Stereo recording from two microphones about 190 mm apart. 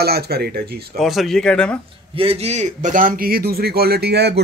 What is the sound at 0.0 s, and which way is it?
Speech, 55° right (ahead or behind).